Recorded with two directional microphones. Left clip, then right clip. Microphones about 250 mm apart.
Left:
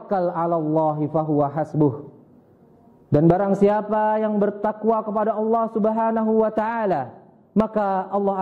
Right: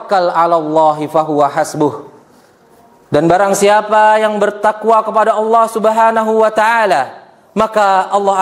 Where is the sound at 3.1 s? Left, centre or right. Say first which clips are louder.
Right 8 dB; centre.